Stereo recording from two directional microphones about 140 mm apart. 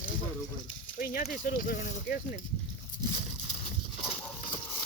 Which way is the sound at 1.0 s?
90° left.